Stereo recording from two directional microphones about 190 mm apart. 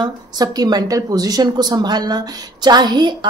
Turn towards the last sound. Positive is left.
turn(degrees=-25)  # may be behind; listen again after turning